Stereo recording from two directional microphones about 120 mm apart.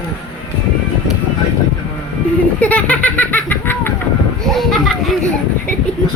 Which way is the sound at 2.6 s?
10° left (ahead or behind).